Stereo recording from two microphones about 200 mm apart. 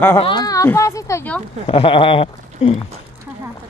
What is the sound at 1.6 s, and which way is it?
Speech, 25° left (ahead or behind).